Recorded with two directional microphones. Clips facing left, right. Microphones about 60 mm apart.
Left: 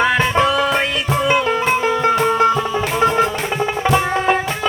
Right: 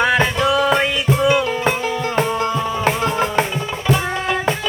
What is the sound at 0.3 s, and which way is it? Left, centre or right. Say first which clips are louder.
Music: even; left.